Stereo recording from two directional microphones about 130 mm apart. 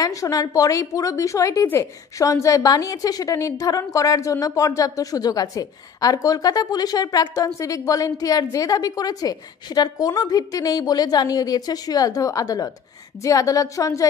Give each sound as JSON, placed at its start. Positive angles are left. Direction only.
{"t": 0.0, "sound": "a woman's voice", "side_deg": 25}